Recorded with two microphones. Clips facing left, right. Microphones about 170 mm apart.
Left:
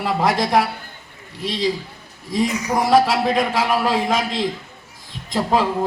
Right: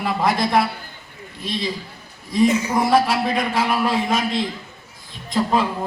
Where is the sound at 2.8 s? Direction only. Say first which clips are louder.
Left 4 dB; 90° left.